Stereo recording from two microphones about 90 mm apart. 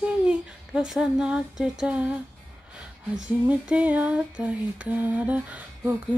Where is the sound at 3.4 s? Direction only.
15° right (ahead or behind).